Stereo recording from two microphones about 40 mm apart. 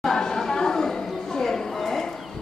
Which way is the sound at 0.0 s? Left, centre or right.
Centre.